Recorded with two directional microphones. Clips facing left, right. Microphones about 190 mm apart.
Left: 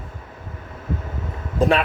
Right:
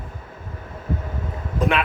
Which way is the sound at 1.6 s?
35° left (ahead or behind).